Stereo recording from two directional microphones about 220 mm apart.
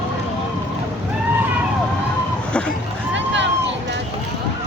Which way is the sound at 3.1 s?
55° right (ahead or behind).